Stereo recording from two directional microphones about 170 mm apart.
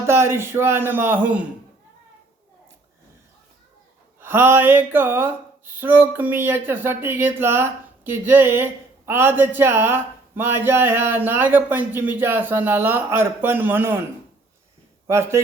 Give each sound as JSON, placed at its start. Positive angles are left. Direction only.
{"t": 0.0, "sound": "speech", "side_deg": -15}
{"t": 4.2, "sound": "speech", "side_deg": -10}
{"t": 15.0, "sound": "a man's voice", "side_deg": -15}